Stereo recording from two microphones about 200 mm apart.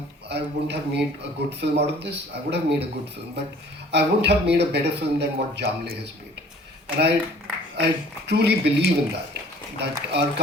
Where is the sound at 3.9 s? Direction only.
55° right (ahead or behind).